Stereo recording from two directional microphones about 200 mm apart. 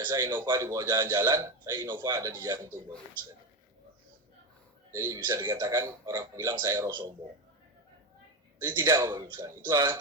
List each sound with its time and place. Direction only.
0.0 s a man's voice: 15° right (ahead or behind)
4.9 s a man's voice: 15° right (ahead or behind)
8.6 s speech: 20° right (ahead or behind)